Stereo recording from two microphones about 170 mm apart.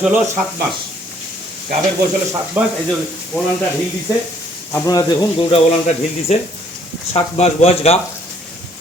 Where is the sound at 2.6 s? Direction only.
10° right (ahead or behind).